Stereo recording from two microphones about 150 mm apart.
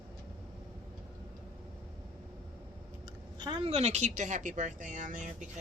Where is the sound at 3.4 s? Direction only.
30° right (ahead or behind).